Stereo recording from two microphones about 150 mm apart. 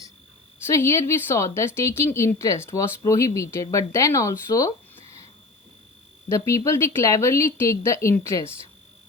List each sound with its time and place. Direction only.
0.7 s a woman's voice: 20° left (ahead or behind)
5.0 s cricket: 40° right (ahead or behind)
6.2 s a woman's voice: 20° left (ahead or behind)